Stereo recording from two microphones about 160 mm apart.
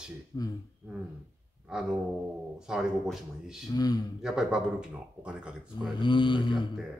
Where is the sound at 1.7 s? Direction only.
5° right (ahead or behind).